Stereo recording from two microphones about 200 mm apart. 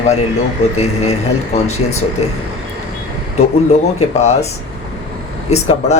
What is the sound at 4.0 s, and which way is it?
Speech, 35° left (ahead or behind).